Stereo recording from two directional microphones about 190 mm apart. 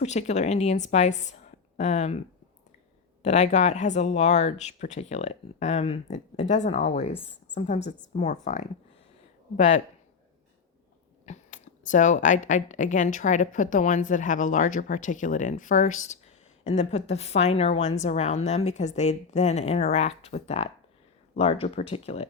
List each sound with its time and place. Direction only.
0.0 s a woman's voice: 35° left (ahead or behind)
3.2 s speech: 35° left (ahead or behind)
9.6 s speech: 40° left (ahead or behind)
11.3 s a sound: 40° left (ahead or behind)
12.5 s speech: 40° left (ahead or behind)